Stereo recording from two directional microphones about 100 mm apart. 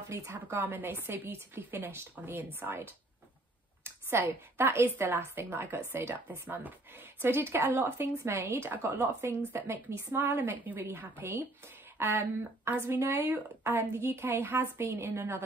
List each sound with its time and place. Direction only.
0.1 s a woman's voice: 30° right (ahead or behind)